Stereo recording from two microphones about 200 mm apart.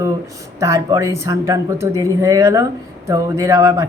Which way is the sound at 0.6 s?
15° right (ahead or behind).